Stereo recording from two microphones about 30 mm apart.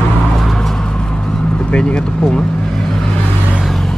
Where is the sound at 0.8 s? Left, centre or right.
Left.